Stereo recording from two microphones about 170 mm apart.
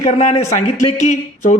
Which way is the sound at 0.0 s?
40° left (ahead or behind).